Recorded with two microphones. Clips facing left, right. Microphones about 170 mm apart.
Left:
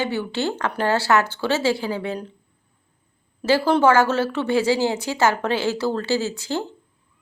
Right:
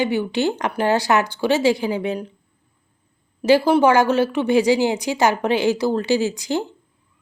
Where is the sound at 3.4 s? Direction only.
15° right (ahead or behind).